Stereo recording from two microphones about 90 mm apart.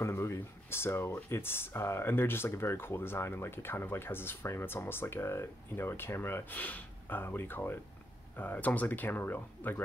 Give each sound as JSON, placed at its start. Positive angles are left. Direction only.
{"t": 0.0, "sound": "speech", "side_deg": 30}